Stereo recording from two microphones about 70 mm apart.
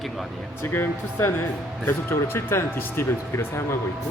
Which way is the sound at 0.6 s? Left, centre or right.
Left.